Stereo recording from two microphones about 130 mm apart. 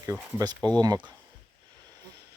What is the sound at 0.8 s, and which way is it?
Speech, 30° right (ahead or behind).